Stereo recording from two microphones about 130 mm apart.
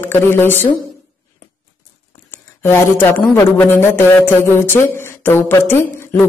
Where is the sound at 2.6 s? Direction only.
15° left (ahead or behind).